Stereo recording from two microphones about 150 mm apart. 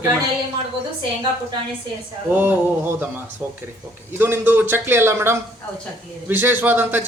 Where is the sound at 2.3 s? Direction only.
10° right (ahead or behind).